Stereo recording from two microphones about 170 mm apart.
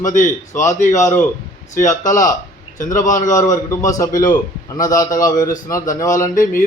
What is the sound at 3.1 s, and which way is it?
Speech, 50° left (ahead or behind).